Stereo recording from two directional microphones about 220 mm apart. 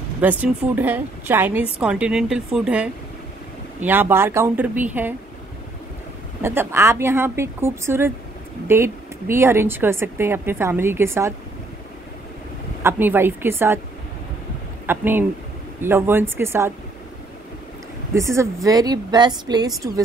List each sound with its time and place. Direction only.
0.2 s a woman's voice: 10° right (ahead or behind)
6.4 s a woman's voice: 10° right (ahead or behind)
12.8 s a woman's voice: 10° right (ahead or behind)
14.9 s a woman's voice: 10° right (ahead or behind)
18.1 s a woman's voice: 15° right (ahead or behind)